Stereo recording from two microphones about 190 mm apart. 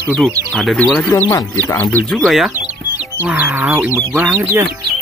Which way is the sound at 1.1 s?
15° left (ahead or behind).